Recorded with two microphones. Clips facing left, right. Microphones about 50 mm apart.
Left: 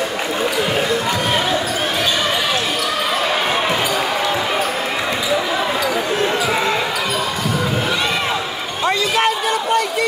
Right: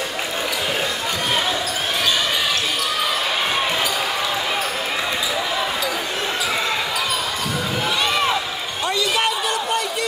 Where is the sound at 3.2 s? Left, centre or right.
Left.